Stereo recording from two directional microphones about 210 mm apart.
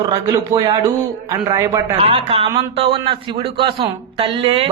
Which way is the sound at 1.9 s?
30° right (ahead or behind).